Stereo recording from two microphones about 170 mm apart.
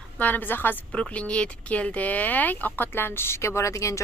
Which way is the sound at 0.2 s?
10° left (ahead or behind).